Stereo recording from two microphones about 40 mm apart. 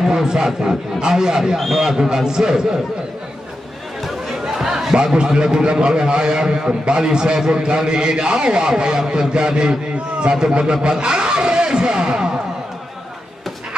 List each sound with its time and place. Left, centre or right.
0.0 s a man's voice: centre
4.6 s a sound: centre
4.9 s a man's voice: right